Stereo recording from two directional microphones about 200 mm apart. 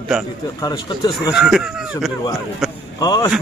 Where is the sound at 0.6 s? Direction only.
20° left (ahead or behind).